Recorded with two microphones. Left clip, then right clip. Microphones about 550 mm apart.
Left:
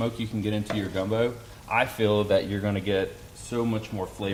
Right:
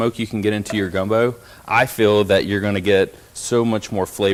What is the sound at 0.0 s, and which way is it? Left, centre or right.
A man's voice, right.